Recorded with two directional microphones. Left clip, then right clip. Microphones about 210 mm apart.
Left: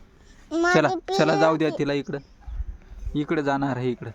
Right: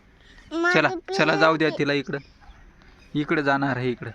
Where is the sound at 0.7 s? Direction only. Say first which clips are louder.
Left 1 dB; 30° left (ahead or behind).